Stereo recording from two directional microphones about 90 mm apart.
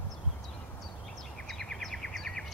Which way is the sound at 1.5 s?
5° left (ahead or behind).